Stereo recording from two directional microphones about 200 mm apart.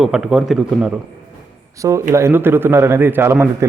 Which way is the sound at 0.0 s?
5° right (ahead or behind).